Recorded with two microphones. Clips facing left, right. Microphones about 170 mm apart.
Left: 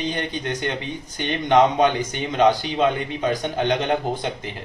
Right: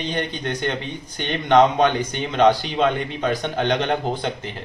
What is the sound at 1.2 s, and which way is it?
Speech, 10° left (ahead or behind).